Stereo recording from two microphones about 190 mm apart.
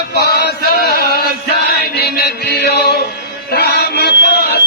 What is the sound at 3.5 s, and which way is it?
Music, 55° left (ahead or behind).